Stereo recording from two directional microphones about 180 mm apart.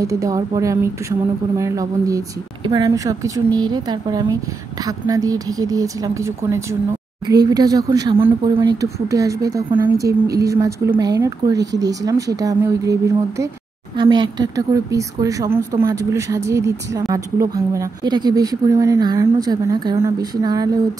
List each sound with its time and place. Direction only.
0.0 s a woman's voice: 20° right (ahead or behind)
13.9 s speech: 25° right (ahead or behind)